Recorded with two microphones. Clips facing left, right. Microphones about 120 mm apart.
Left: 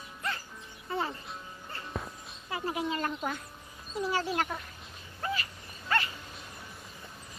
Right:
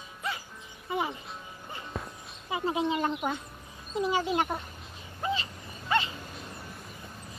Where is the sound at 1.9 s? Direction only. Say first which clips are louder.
Even; centre (ahead or behind).